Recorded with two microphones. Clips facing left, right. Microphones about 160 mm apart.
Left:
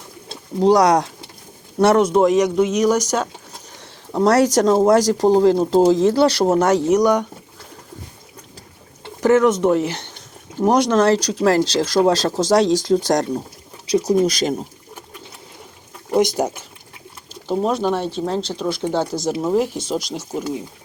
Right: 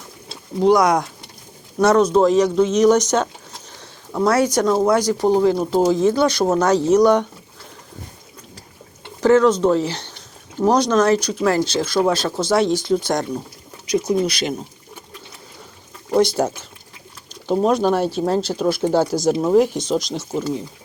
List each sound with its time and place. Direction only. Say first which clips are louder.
0.6 s speech: left 1 dB; 35° left (ahead or behind); by 3.2 s 10° left (ahead or behind)
4.9 s speech: left 2 dB; 40° left (ahead or behind)
5.5 s speech: left 3 dB; 30° left (ahead or behind)
6.4 s speech: left 1 dB; 20° left (ahead or behind)
9.2 s speech: right 1 dB; 20° left (ahead or behind); by 14.6 s 40° left (ahead or behind)
16.1 s speech: right 1 dB; 15° left (ahead or behind)
17.5 s speech: right 3 dB; centre (ahead or behind)